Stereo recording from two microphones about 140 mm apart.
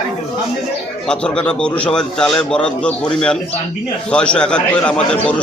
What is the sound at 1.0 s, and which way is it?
A man's voice, 5° left (ahead or behind).